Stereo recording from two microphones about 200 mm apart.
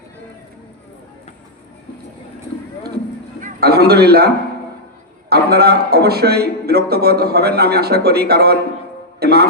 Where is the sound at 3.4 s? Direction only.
50° right (ahead or behind).